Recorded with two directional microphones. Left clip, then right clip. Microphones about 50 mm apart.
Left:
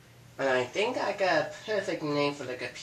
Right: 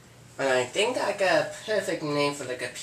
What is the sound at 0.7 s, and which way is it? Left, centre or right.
Speech, left.